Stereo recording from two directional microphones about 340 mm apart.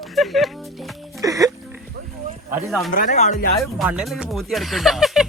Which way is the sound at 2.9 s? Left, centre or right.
Left.